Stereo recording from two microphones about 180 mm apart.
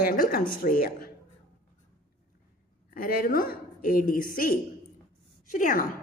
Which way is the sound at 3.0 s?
50° left (ahead or behind).